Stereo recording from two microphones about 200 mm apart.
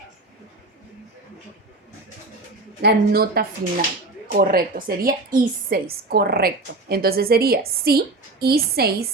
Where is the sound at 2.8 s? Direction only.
50° right (ahead or behind).